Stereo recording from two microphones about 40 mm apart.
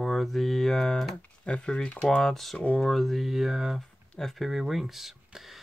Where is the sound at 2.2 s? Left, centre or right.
Centre.